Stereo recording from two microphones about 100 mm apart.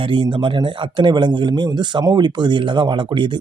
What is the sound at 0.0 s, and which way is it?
A man's voice, 55° right (ahead or behind).